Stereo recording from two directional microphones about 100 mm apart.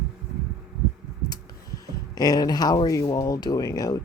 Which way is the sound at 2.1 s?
40° left (ahead or behind).